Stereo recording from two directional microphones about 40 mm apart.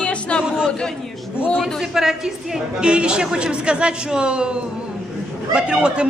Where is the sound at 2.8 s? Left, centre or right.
Right.